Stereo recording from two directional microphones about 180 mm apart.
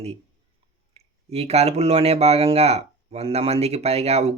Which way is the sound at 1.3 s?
35° right (ahead or behind).